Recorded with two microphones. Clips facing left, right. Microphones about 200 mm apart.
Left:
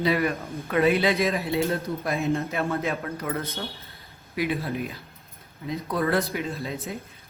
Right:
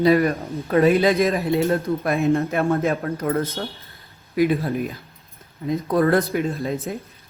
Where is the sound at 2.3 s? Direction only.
55° right (ahead or behind).